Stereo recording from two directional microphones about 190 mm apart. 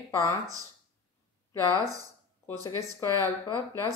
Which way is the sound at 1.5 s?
20° left (ahead or behind).